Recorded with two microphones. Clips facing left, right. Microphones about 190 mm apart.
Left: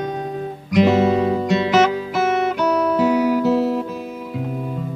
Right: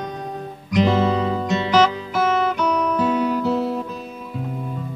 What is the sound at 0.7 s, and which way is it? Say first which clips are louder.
Guitar: left 3 dB; 10° left (ahead or behind).